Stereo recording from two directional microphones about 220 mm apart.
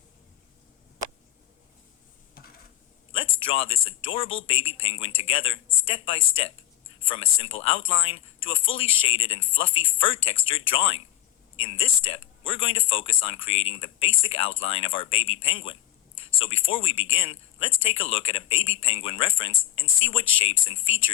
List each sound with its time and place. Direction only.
3.1 s speech: 25° left (ahead or behind)